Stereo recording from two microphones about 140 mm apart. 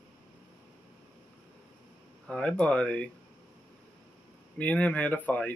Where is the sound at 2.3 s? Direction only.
10° left (ahead or behind).